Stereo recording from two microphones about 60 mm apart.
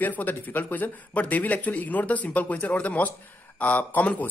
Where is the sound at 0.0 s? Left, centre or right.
Left.